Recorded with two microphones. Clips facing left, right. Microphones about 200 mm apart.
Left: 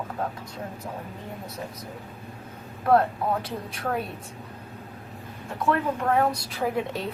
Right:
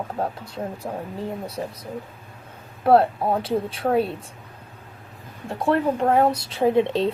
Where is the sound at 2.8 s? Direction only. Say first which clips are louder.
Right 4 dB; 30° right (ahead or behind).